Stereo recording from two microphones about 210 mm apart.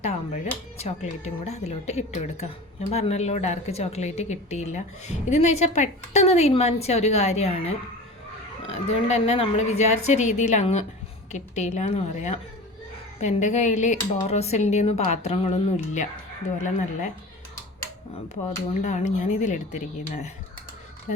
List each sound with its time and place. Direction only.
0.0 s a woman's voice: 30° left (ahead or behind)
18.8 s a woman's voice: 35° left (ahead or behind)